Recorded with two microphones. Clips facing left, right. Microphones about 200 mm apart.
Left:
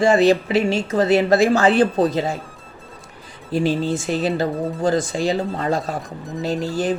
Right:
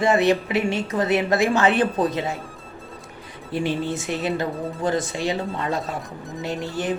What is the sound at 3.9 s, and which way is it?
Speech, 30° left (ahead or behind).